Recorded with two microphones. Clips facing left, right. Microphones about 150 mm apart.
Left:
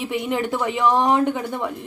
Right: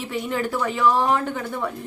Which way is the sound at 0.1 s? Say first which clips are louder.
Left 1 dB; 20° left (ahead or behind).